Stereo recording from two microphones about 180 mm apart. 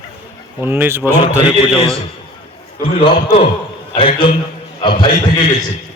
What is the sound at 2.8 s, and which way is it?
A man's voice, 30° left (ahead or behind).